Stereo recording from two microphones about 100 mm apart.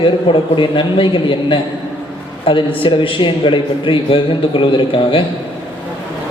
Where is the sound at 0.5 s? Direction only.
55° left (ahead or behind).